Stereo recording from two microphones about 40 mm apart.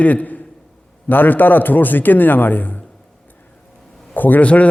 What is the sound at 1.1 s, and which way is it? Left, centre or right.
A man's voice, left.